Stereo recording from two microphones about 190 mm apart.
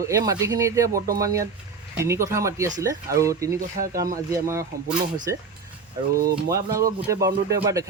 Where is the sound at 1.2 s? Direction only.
15° right (ahead or behind).